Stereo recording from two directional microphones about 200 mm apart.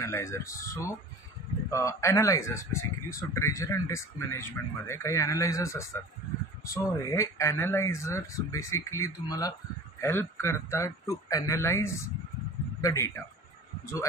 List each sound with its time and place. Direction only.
0.0 s speech: 15° left (ahead or behind)